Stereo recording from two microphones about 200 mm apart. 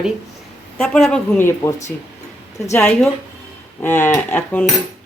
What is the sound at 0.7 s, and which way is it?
Speech, 5° left (ahead or behind).